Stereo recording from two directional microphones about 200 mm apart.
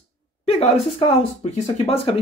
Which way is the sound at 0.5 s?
30° left (ahead or behind).